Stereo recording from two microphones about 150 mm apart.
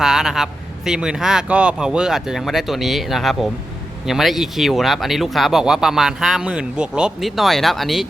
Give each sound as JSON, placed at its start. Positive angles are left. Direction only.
{"t": 0.0, "sound": "speech", "side_deg": -5}